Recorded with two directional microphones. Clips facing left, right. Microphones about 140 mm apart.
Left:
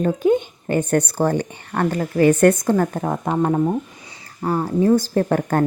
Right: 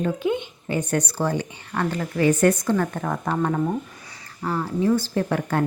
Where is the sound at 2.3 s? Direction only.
55° left (ahead or behind).